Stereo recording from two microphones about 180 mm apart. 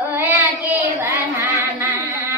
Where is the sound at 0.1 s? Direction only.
10° right (ahead or behind).